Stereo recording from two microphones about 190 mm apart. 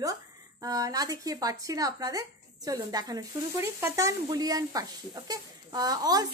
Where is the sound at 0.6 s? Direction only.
20° right (ahead or behind).